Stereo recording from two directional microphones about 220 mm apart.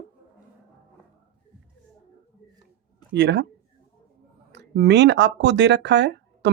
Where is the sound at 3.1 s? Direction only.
50° right (ahead or behind).